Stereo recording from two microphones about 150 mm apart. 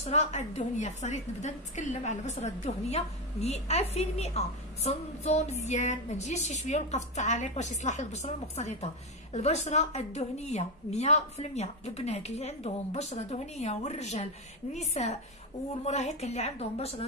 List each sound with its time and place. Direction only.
0.0 s a woman's voice: 50° left (ahead or behind)